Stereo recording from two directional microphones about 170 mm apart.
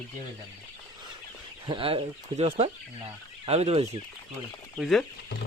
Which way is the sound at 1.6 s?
30° right (ahead or behind).